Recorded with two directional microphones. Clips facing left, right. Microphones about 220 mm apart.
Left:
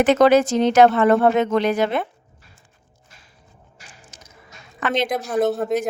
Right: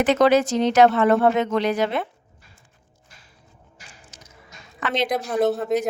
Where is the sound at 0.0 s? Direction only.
50° left (ahead or behind).